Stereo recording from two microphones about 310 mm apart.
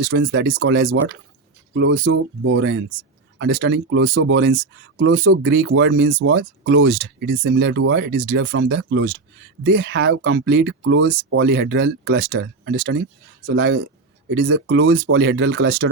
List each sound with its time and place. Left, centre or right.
0.1 s speech: right